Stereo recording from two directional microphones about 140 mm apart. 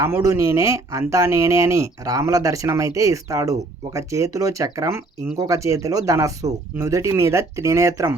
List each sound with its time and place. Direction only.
0.0 s speech: 20° right (ahead or behind)